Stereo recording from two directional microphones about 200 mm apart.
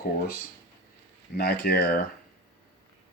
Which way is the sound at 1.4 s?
55° left (ahead or behind).